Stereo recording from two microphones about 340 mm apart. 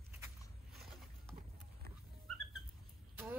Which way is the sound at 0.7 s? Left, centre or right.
Centre.